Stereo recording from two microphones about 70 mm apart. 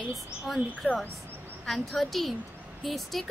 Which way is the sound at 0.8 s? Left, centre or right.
Left.